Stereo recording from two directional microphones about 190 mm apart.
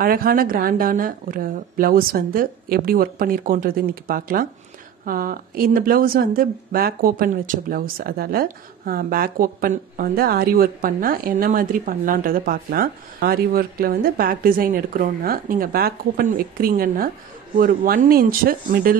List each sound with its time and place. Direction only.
0.0 s speech: 50° right (ahead or behind)